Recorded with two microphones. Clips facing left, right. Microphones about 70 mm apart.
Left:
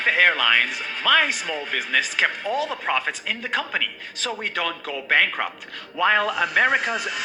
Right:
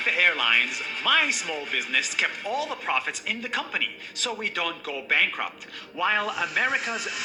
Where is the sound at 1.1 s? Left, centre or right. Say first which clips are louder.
Left 4 dB; left.